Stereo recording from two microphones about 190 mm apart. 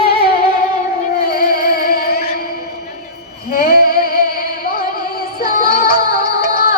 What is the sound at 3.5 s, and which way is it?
Music, 50° left (ahead or behind).